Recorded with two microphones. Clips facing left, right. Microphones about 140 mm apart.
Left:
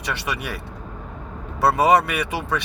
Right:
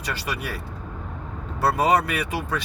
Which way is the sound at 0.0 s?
70° left (ahead or behind).